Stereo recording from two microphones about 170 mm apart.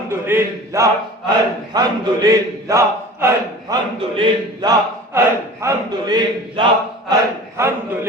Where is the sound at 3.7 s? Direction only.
25° right (ahead or behind).